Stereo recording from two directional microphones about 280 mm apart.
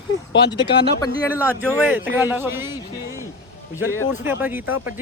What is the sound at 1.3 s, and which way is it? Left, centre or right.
A man's voice, centre.